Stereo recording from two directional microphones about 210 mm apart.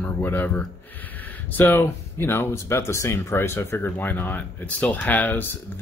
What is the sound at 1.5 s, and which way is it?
Speech, 10° left (ahead or behind).